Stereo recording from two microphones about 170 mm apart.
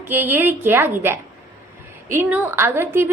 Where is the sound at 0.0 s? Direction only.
10° right (ahead or behind).